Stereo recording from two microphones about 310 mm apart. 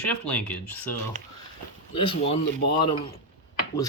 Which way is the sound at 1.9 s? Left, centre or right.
Centre.